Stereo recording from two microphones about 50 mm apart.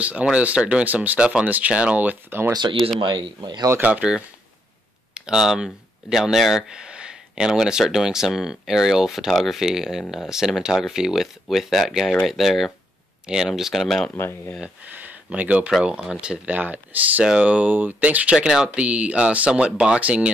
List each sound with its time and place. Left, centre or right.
0.0 s speech: right
2.0 s speech: right
3.8 s speech: right
5.1 s speech: centre
6.7 s speech: centre
14.1 s speech: left
15.2 s speech: right
16.4 s speech: right
17.2 s speech: centre
17.5 s speech: right
18.3 s speech: centre